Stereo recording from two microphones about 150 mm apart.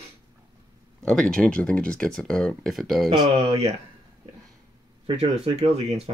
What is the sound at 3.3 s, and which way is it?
Speech, 40° right (ahead or behind).